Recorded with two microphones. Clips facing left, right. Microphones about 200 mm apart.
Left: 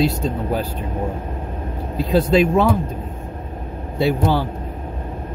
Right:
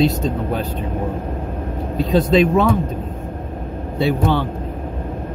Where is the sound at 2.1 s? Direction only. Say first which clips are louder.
Right 1 dB; 5° left (ahead or behind).